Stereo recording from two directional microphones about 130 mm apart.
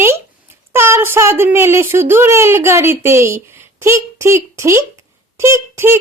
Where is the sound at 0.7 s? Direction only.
20° right (ahead or behind).